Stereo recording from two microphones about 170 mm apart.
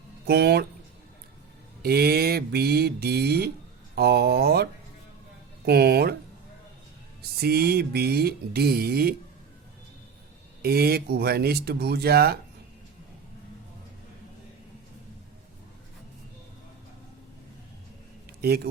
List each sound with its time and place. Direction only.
0.3 s music: 70° right (ahead or behind)
1.8 s music: 65° right (ahead or behind)
7.2 s music: 65° right (ahead or behind)
10.6 s music: 65° right (ahead or behind)
18.4 s music: 65° right (ahead or behind)